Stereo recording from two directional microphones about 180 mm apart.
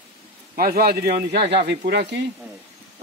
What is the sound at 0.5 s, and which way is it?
Speech, 55° right (ahead or behind).